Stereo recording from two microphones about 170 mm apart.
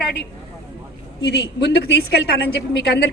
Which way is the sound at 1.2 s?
80° left.